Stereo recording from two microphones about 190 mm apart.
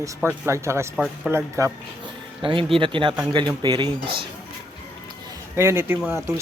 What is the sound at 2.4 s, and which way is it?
Speech, 25° right (ahead or behind).